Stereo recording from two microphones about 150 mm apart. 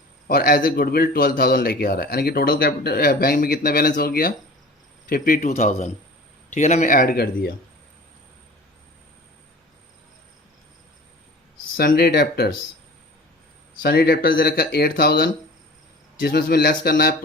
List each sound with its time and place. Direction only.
0.3 s speech: 90° left
11.8 s speech: 90° left
13.8 s speech: 90° left